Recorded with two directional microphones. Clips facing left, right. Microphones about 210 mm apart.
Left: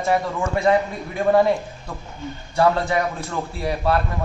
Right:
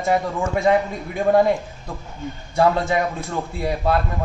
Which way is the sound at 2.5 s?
15° right (ahead or behind).